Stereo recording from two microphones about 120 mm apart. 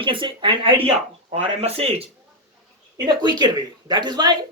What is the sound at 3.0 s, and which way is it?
Speech, 35° right (ahead or behind).